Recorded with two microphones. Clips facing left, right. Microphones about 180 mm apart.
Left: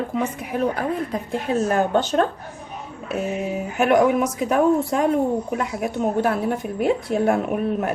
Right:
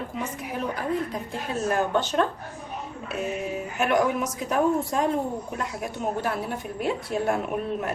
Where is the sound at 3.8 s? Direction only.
55° left (ahead or behind).